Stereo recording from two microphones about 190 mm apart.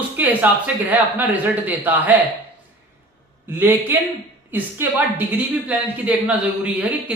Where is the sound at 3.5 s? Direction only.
10° right (ahead or behind).